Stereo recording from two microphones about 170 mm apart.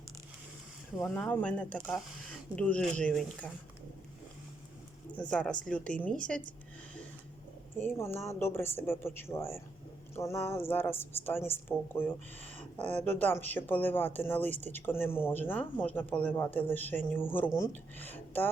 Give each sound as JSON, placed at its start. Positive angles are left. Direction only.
{"t": 1.0, "sound": "speech", "side_deg": 10}
{"t": 5.3, "sound": "speech", "side_deg": 5}
{"t": 7.8, "sound": "speech", "side_deg": 15}